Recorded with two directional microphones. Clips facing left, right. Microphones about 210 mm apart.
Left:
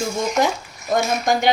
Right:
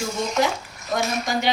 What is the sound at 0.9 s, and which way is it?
Speech, 50° left (ahead or behind).